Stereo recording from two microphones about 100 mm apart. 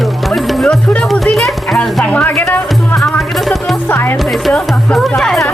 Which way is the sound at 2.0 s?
15° left (ahead or behind).